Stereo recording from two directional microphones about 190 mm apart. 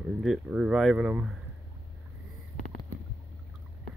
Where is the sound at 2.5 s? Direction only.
45° left (ahead or behind).